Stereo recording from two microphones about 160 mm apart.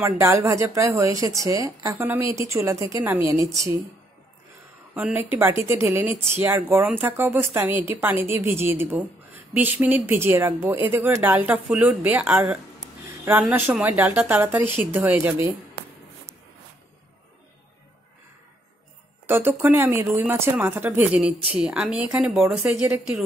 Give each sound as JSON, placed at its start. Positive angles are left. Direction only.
{"t": 0.0, "sound": "speech", "side_deg": -15}
{"t": 4.9, "sound": "speech", "side_deg": -10}
{"t": 19.2, "sound": "a woman's voice", "side_deg": -15}